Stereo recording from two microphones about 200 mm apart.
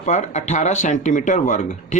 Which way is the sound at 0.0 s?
35° left (ahead or behind).